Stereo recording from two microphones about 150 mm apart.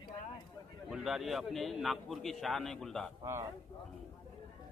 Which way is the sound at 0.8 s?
Centre (ahead or behind).